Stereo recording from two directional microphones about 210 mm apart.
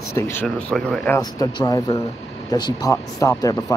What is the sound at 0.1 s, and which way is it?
Speech, 5° left (ahead or behind).